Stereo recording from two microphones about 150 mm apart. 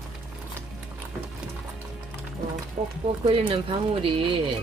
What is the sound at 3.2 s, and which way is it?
Speech, 35° right (ahead or behind).